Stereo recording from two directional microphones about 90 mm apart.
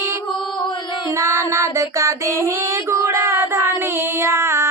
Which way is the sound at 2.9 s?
30° right (ahead or behind).